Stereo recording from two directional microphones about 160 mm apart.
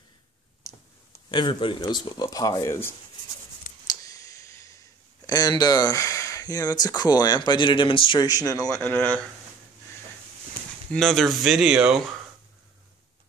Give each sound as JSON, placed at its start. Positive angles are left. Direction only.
{"t": 1.3, "sound": "speech", "side_deg": 30}
{"t": 3.8, "sound": "a sound", "side_deg": 25}
{"t": 5.2, "sound": "speech", "side_deg": 25}
{"t": 10.9, "sound": "speech", "side_deg": 0}